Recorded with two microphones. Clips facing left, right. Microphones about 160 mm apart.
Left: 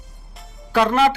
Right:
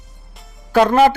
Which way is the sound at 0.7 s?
45° right (ahead or behind).